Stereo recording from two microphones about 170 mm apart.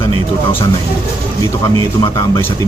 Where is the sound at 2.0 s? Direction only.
20° left (ahead or behind).